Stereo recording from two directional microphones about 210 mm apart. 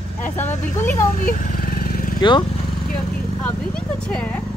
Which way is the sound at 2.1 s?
20° left (ahead or behind).